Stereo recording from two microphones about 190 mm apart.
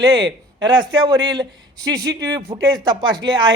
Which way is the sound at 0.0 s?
20° right (ahead or behind).